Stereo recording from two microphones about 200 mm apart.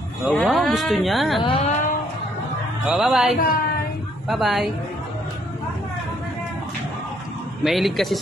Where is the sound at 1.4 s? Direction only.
25° left (ahead or behind).